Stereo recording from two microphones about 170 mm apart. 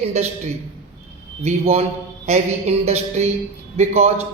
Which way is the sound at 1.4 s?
35° right (ahead or behind).